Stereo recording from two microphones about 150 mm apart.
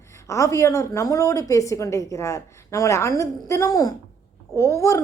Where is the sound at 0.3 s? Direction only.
20° left (ahead or behind).